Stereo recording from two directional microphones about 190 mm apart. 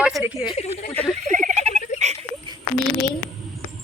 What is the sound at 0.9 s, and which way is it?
Speech, 10° left (ahead or behind).